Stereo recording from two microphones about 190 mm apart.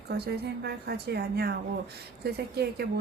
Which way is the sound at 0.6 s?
55° right (ahead or behind).